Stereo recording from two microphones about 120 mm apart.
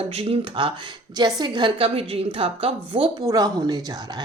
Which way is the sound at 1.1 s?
35° right (ahead or behind).